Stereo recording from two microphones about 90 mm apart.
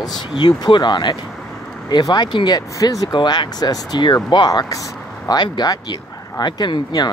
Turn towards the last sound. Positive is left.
turn(degrees=55)  # may be behind; listen again after turning